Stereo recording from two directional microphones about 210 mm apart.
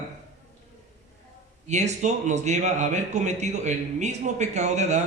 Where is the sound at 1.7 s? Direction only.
35° right (ahead or behind).